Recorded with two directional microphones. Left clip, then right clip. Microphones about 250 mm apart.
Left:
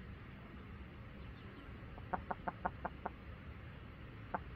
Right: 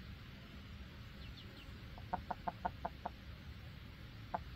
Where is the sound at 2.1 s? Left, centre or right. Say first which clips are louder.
Even; right.